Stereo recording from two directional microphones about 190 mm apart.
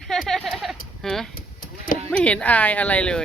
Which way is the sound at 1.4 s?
45° left (ahead or behind).